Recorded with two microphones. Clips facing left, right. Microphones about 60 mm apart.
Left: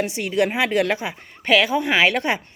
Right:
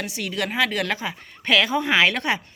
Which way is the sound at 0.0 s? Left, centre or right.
Left.